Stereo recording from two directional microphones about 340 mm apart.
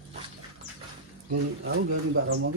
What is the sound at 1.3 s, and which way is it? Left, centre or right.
Speech, right.